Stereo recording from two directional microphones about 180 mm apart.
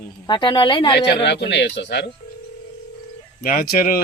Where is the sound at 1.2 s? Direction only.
75° left (ahead or behind).